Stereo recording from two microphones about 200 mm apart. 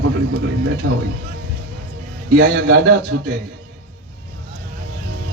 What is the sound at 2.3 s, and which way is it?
Speech, 65° right (ahead or behind).